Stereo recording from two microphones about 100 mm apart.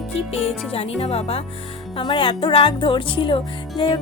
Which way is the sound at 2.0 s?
55° left (ahead or behind).